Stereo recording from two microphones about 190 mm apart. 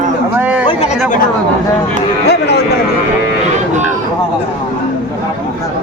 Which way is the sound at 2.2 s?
60° left (ahead or behind).